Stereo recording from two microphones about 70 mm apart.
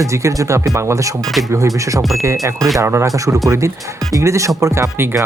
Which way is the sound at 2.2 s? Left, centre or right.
Right.